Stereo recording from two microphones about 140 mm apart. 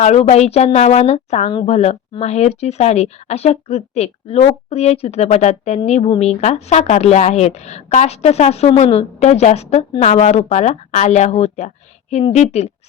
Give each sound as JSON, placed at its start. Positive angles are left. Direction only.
{"t": 0.0, "sound": "speech", "side_deg": 50}